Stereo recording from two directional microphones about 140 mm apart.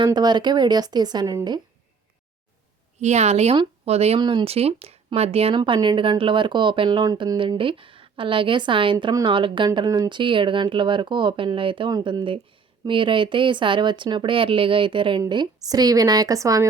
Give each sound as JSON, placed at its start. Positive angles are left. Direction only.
{"t": 0.0, "sound": "speech", "side_deg": -30}
{"t": 3.0, "sound": "speech", "side_deg": -55}
{"t": 4.2, "sound": "speech", "side_deg": -30}
{"t": 4.4, "sound": "speech", "side_deg": -45}
{"t": 5.5, "sound": "speech", "side_deg": -35}